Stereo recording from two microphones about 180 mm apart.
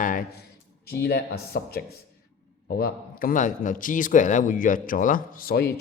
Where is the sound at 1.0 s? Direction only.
55° left (ahead or behind).